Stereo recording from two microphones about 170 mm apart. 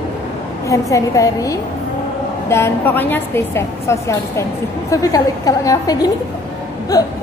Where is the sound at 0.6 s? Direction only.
20° left (ahead or behind).